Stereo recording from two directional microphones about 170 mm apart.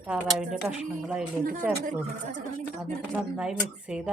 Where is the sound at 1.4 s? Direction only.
55° right (ahead or behind).